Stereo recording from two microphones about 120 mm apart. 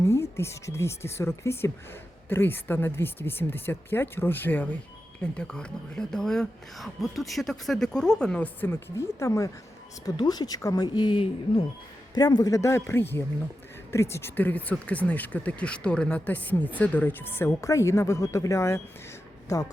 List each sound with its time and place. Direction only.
0.0 s speech: 20° left (ahead or behind)
8.6 s speech: 20° left (ahead or behind); by 11.6 s 45° left (ahead or behind)
12.1 s speech: 35° left (ahead or behind)